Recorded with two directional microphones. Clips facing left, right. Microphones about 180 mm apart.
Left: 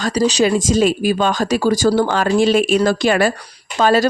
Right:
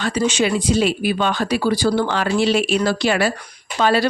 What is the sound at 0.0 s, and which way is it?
Speech, 40° left (ahead or behind).